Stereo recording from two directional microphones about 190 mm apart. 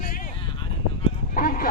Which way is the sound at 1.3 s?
45° left (ahead or behind).